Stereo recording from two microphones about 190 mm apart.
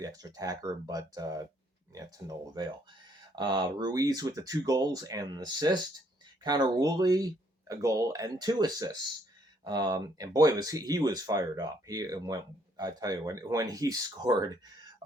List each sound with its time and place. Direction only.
0.0 s speech: 20° right (ahead or behind)